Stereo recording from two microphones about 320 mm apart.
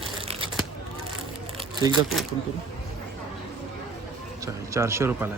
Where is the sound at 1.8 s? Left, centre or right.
Centre.